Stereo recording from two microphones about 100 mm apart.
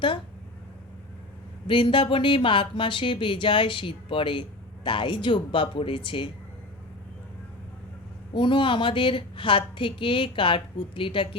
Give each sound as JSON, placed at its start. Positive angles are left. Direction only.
{"t": 1.6, "sound": "speech", "side_deg": 55}
{"t": 8.3, "sound": "speech", "side_deg": 55}